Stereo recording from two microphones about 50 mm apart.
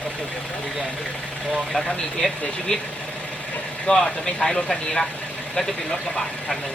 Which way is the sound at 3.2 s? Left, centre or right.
Left.